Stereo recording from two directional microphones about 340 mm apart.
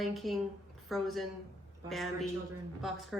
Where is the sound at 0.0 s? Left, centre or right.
Centre.